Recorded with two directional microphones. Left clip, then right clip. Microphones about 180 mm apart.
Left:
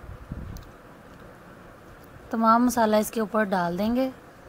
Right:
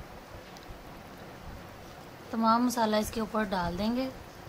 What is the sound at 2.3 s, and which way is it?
A woman's voice, 35° left (ahead or behind).